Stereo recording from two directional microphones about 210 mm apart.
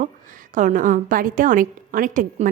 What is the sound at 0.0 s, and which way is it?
A woman's voice, 40° right (ahead or behind).